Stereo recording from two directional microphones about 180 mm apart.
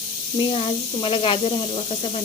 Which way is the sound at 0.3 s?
30° left (ahead or behind).